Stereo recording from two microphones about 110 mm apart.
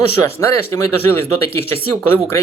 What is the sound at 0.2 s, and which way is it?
Speech, 25° left (ahead or behind).